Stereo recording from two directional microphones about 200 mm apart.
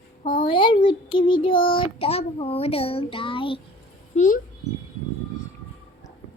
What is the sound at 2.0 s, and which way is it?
A child's voice, 30° left (ahead or behind).